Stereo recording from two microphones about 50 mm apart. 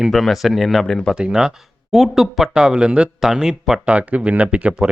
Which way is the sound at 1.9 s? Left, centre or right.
Centre.